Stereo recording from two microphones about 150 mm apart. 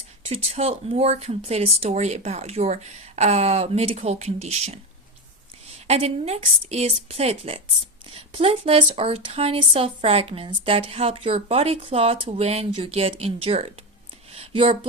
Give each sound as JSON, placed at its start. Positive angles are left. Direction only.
{"t": 0.3, "sound": "speech", "side_deg": -45}
{"t": 5.9, "sound": "speech", "side_deg": -45}
{"t": 14.3, "sound": "a sound", "side_deg": -40}